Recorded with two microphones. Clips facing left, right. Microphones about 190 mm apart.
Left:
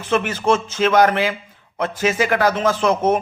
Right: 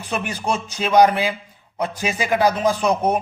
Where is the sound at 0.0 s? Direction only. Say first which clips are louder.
Left 6 dB; 15° right (ahead or behind).